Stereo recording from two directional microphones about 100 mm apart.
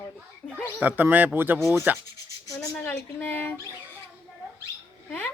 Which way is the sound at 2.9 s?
15° left (ahead or behind).